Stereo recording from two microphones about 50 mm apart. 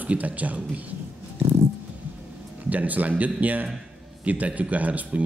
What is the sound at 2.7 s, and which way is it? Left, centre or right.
Speech, right.